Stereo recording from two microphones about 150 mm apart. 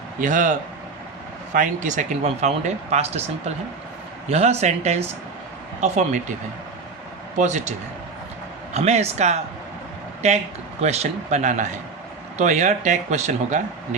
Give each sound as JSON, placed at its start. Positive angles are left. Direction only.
{"t": 0.2, "sound": "a man's voice", "side_deg": -60}
{"t": 1.5, "sound": "speech", "side_deg": -55}
{"t": 4.3, "sound": "speech", "side_deg": -45}
{"t": 7.3, "sound": "speech", "side_deg": -50}
{"t": 8.7, "sound": "speech", "side_deg": -45}